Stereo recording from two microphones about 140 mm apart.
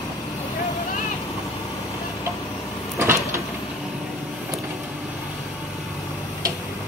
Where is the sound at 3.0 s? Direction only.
20° right (ahead or behind).